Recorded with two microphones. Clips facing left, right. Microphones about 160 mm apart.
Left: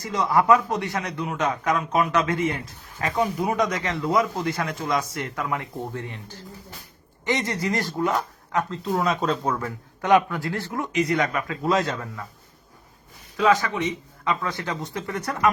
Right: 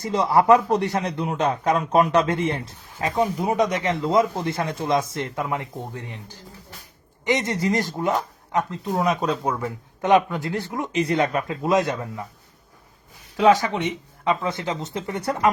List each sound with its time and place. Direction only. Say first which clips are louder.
0.0 s a man's voice: right 3 dB; 30° right (ahead or behind)
13.3 s a man's voice: right 3 dB; 30° right (ahead or behind)